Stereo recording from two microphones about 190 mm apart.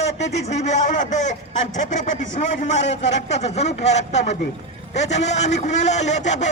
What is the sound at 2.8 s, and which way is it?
Speech, 70° left (ahead or behind).